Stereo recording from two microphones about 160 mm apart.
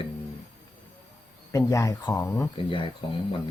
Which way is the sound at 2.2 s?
10° left (ahead or behind).